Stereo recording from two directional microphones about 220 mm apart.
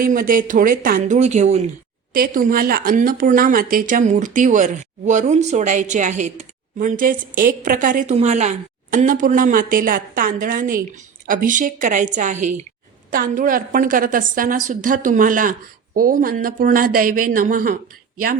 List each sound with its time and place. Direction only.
0.0 s speech: 40° right (ahead or behind)